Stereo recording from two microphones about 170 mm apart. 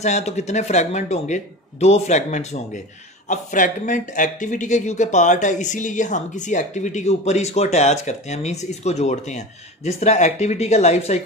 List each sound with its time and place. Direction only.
0.0 s speech: 40° left (ahead or behind)